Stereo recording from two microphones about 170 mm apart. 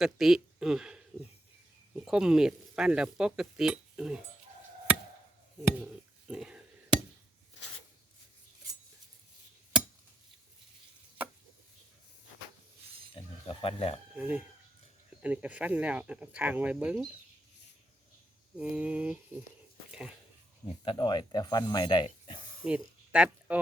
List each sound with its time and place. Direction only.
0.0 s speech: 5° right (ahead or behind)
5.6 s a sound: 5° right (ahead or behind)
13.5 s speech: 35° left (ahead or behind)
14.2 s speech: 10° right (ahead or behind)
18.5 s speech: 5° right (ahead or behind)
19.9 s a sound: 5° right (ahead or behind)
20.7 s speech: 30° left (ahead or behind)
22.6 s speech: 5° right (ahead or behind)